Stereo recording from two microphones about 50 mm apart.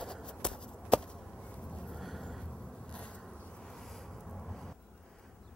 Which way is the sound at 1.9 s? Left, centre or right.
Centre.